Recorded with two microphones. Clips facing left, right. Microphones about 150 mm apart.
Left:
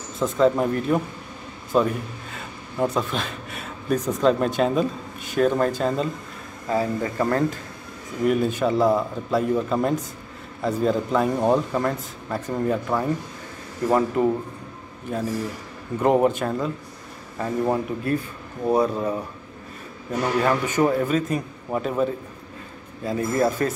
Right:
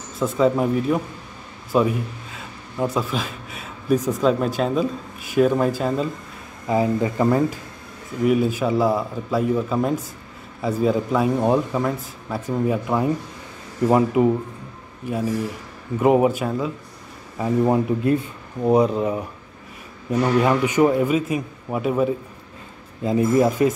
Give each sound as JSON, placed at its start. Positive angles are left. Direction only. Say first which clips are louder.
{"t": 0.2, "sound": "speech", "louder": "right 1 dB", "side_deg": -5}
{"t": 6.7, "sound": "a man's voice", "louder": "right 4 dB", "side_deg": -15}
{"t": 16.0, "sound": "speech", "louder": "right 2 dB", "side_deg": -5}
{"t": 17.4, "sound": "a man's voice", "louder": "right 4 dB", "side_deg": -15}